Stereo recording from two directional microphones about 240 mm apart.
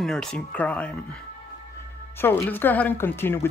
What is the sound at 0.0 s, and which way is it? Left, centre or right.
Speech, centre.